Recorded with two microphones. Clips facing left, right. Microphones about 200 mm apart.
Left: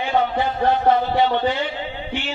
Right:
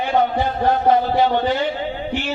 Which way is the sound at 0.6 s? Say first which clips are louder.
Right 1 dB; 40° right (ahead or behind).